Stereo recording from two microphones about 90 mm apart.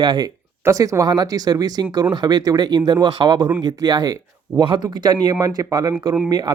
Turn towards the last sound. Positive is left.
turn(degrees=-55)  # may be behind; listen again after turning